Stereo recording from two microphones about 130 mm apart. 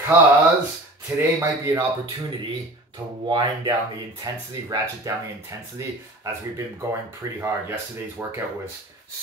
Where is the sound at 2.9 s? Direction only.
35° right (ahead or behind).